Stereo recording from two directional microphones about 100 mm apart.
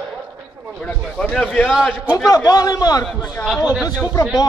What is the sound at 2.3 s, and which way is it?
Speech, 40° left (ahead or behind).